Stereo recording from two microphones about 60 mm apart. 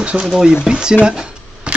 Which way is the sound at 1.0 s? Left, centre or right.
Centre.